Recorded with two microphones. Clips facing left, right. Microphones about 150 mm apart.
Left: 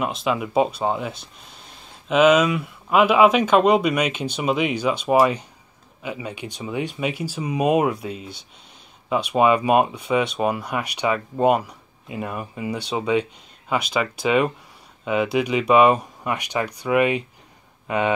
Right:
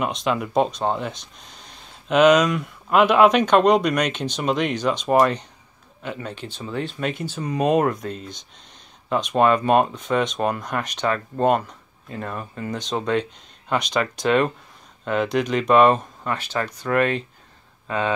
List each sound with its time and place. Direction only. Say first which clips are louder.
0.0 s speech: even; 5° left (ahead or behind)